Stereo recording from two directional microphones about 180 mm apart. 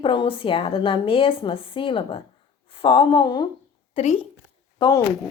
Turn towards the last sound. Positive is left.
turn(degrees=25)  # may be behind; listen again after turning